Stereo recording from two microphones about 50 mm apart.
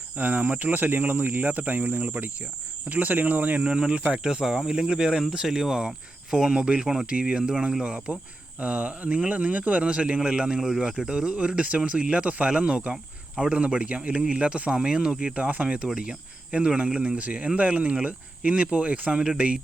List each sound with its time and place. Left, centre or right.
0.2 s speech: right
3.6 s speech: centre
6.8 s speech: centre
7.1 s speech: centre
7.9 s speech: right
15.8 s speech: centre